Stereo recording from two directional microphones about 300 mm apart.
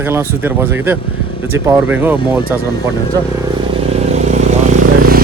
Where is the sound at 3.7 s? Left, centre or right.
Centre.